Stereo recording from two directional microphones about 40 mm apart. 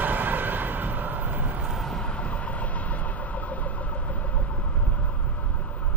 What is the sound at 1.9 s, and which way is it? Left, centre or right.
Vehicle, left.